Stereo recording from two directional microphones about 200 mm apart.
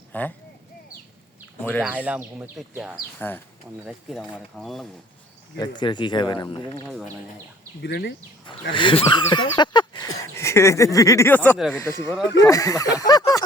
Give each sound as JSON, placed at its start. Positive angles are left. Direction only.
{"t": 0.1, "sound": "speech", "side_deg": 10}
{"t": 1.8, "sound": "speech", "side_deg": -5}
{"t": 3.2, "sound": "speech", "side_deg": 10}
{"t": 5.5, "sound": "speech", "side_deg": 20}
{"t": 6.8, "sound": "speech", "side_deg": 0}
{"t": 7.8, "sound": "speech", "side_deg": 55}
{"t": 8.7, "sound": "speech", "side_deg": 25}
{"t": 11.8, "sound": "speech", "side_deg": 10}